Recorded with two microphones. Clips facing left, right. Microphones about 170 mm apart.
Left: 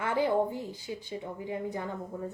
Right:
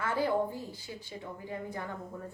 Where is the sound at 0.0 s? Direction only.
20° left (ahead or behind).